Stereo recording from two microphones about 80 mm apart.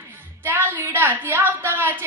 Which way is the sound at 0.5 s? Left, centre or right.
Right.